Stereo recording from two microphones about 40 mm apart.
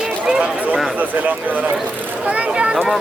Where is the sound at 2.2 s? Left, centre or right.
Right.